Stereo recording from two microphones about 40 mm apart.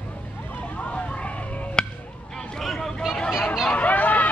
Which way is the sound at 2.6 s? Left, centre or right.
Centre.